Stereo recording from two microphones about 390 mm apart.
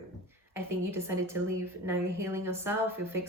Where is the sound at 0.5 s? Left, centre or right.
Centre.